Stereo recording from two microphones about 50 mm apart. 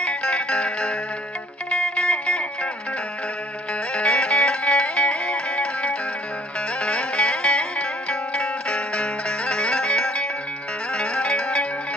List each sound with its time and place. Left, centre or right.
0.0 s music: left
3.9 s music: left
8.1 s zither: centre
11.0 s music: centre